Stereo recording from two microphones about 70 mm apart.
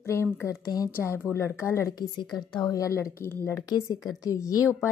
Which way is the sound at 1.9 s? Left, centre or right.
Left.